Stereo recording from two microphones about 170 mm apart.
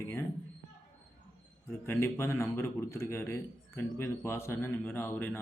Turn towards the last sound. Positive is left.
turn(degrees=10)  # may be behind; listen again after turning